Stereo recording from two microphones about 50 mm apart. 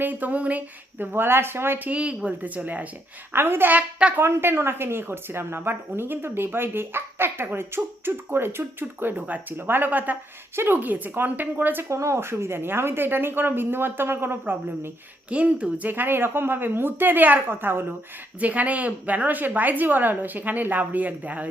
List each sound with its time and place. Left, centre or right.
0.0 s a woman's voice: right
0.9 s speech: right
1.9 s a woman's voice: right
3.3 s speech: right
3.7 s a woman's voice: right
4.2 s speech: right
9.1 s a woman's voice: right
11.9 s speech: right
15.3 s a woman's voice: right
15.8 s speech: right
18.3 s a woman's voice: right